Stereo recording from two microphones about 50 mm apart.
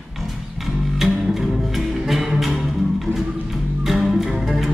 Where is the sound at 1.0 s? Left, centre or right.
Centre.